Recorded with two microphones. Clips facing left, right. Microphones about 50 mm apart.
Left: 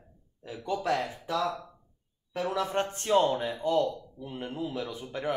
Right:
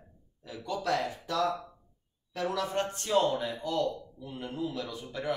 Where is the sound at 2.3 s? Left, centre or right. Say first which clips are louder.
Left 2 dB; left.